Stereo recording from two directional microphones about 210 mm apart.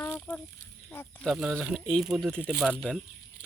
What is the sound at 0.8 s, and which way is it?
Speech, 5° left (ahead or behind).